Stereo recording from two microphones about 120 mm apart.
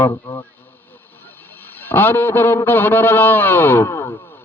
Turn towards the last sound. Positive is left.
turn(degrees=20)  # may be behind; listen again after turning